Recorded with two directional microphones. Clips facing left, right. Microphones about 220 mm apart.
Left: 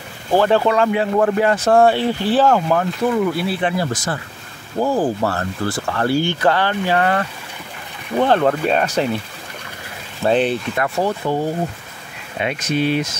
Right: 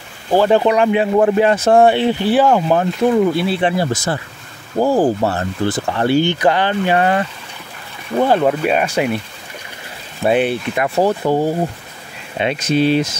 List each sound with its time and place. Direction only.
0.3 s speech: 15° right (ahead or behind)
2.7 s speech: 25° right (ahead or behind); by 9.1 s 10° right (ahead or behind)
10.2 s speech: 10° right (ahead or behind)
11.0 s speech: 35° right (ahead or behind)
12.4 s speech: 25° right (ahead or behind)